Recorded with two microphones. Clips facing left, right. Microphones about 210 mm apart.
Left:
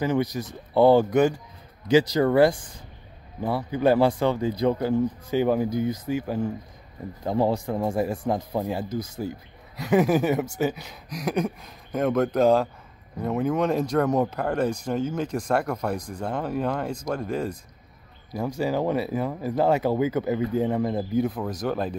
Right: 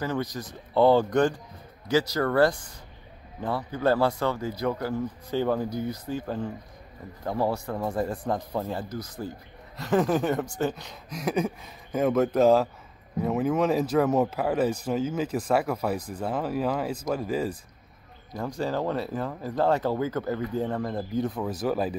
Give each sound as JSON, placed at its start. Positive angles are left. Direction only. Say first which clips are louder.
{"t": 0.0, "sound": "speech", "louder": "left 5 dB", "side_deg": 15}
{"t": 18.6, "sound": "speech", "louder": "left 3 dB", "side_deg": 10}